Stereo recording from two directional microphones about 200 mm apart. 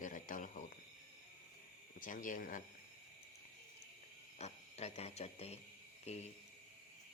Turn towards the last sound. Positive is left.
turn(degrees=30)  # may be behind; listen again after turning